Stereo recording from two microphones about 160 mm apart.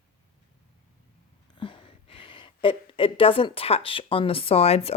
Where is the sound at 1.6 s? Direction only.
30° left (ahead or behind).